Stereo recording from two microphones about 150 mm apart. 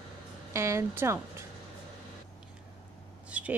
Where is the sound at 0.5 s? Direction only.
20° right (ahead or behind).